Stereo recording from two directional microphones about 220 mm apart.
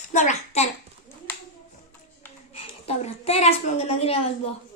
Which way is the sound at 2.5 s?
25° left (ahead or behind).